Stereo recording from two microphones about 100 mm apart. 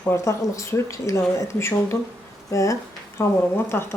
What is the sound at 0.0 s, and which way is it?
Speech, 30° left (ahead or behind).